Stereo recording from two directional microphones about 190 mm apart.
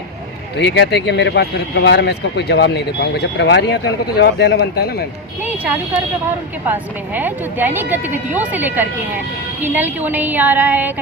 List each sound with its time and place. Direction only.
0.6 s speech: 65° left (ahead or behind)
6.7 s speech: 10° right (ahead or behind)